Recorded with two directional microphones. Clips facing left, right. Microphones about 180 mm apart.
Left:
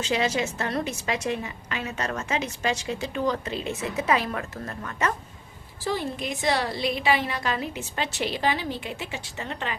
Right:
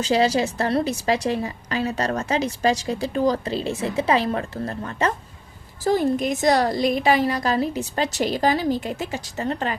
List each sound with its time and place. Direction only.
0.0 s a woman's voice: 35° right (ahead or behind)
5.8 s a woman's voice: 45° right (ahead or behind)